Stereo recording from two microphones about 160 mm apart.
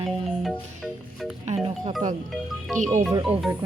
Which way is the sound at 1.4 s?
40° right (ahead or behind).